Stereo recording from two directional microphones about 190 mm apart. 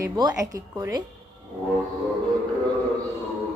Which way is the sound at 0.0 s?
20° right (ahead or behind).